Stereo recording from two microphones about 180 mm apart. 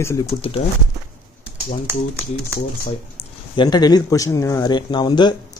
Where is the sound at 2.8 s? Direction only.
30° left (ahead or behind).